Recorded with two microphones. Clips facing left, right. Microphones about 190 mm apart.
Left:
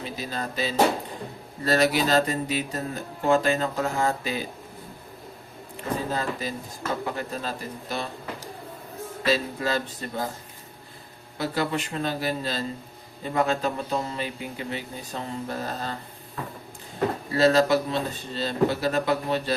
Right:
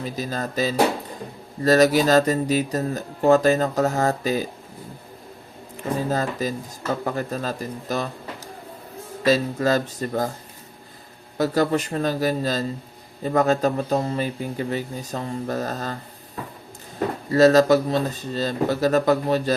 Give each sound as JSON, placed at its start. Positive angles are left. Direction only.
{"t": 0.0, "sound": "speech", "side_deg": -40}
{"t": 6.1, "sound": "speech", "side_deg": -45}
{"t": 9.2, "sound": "speech", "side_deg": -45}
{"t": 11.3, "sound": "speech", "side_deg": -40}
{"t": 17.3, "sound": "speech", "side_deg": -45}